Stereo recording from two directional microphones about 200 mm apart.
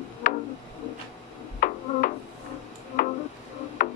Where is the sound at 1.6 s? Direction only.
45° left (ahead or behind).